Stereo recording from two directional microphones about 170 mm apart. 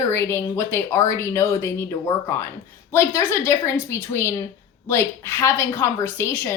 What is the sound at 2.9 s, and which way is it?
A woman's voice, 15° left (ahead or behind).